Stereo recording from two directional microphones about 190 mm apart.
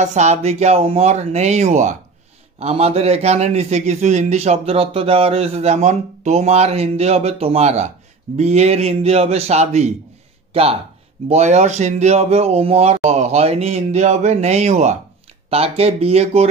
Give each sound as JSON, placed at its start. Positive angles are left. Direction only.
{"t": 0.0, "sound": "a man's voice", "side_deg": -35}